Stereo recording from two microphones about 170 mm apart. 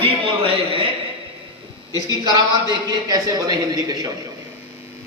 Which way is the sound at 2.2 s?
25° right (ahead or behind).